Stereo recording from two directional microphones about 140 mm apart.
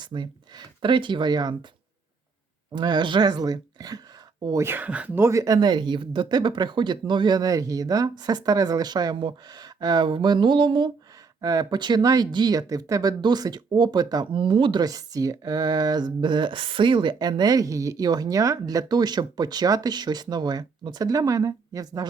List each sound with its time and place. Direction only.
0.0 s speech: 35° right (ahead or behind)
2.7 s speech: 30° right (ahead or behind)
11.3 s speech: 25° right (ahead or behind)